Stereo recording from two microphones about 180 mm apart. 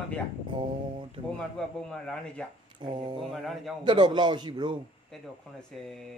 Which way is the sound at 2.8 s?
25° right (ahead or behind).